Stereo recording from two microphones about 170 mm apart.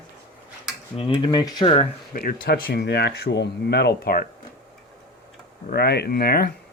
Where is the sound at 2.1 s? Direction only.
60° left (ahead or behind).